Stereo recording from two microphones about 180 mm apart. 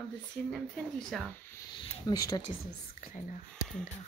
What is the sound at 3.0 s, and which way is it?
Speech, 45° left (ahead or behind).